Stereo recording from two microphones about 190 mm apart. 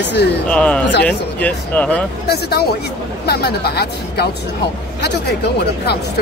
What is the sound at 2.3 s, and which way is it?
Speech, 60° left (ahead or behind).